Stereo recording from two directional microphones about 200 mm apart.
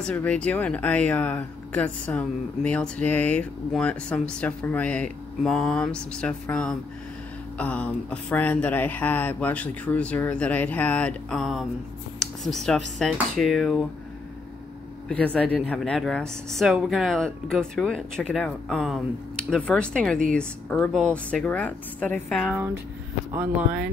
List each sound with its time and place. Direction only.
0.0 s speech: 5° left (ahead or behind)
15.0 s speech: 5° left (ahead or behind)